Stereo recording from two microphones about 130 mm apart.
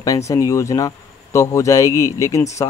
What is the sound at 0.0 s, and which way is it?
Speech, 25° left (ahead or behind).